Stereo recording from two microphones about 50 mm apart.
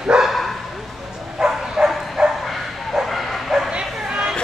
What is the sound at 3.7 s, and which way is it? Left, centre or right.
Bow-wow, centre.